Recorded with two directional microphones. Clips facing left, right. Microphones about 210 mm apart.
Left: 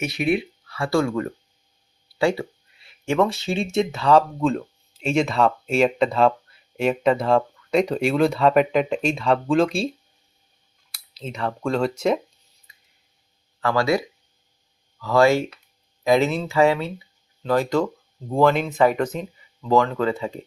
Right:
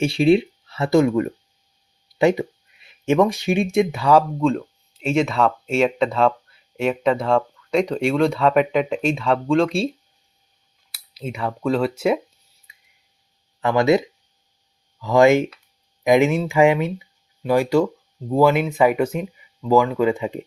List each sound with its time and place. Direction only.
0.0 s speech: 30° right (ahead or behind); by 4.2 s 10° right (ahead or behind)
4.4 s speech: centre (ahead or behind)
10.9 s speech: 10° right (ahead or behind)
12.7 s a sound: 10° right (ahead or behind)
13.6 s speech: 20° right (ahead or behind)
15.0 s speech: 15° right (ahead or behind)